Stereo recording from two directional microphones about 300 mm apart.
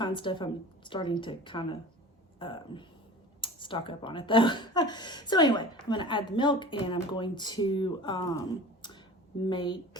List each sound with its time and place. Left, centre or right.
0.0 s speech: centre